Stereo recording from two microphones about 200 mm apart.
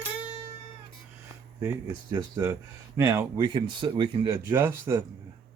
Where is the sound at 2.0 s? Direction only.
20° right (ahead or behind).